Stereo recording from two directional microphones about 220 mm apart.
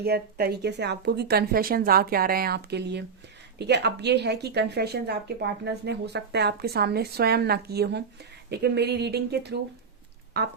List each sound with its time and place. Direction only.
0.0 s speech: 45° right (ahead or behind)